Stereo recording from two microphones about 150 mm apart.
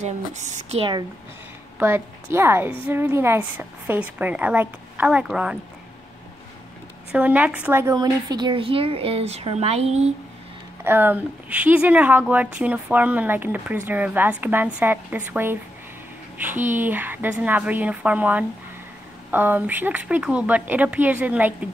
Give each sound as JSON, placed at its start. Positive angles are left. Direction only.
{"t": 0.0, "sound": "speech", "side_deg": -50}
{"t": 1.8, "sound": "speech", "side_deg": -15}
{"t": 7.1, "sound": "speech", "side_deg": -10}
{"t": 7.9, "sound": "speech", "side_deg": -25}
{"t": 10.8, "sound": "speech", "side_deg": -15}